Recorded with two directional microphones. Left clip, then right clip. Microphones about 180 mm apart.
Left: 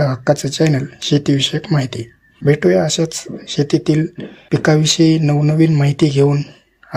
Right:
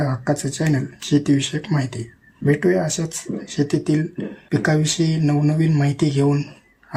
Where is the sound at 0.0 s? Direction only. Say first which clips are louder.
Left 7 dB; 30° left (ahead or behind).